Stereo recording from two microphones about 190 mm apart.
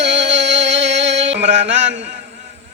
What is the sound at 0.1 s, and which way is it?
Music, 70° right (ahead or behind).